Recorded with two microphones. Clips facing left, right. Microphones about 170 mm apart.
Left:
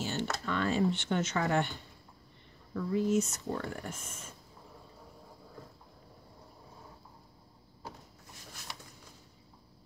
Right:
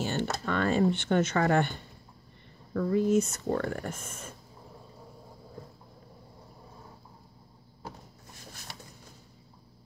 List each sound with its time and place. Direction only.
0.0 s speech: 55° right (ahead or behind)